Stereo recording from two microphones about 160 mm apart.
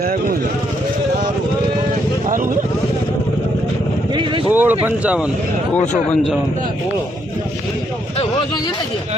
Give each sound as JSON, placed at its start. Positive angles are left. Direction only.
{"t": 0.0, "sound": "speech", "side_deg": -65}
{"t": 4.5, "sound": "speech", "side_deg": -10}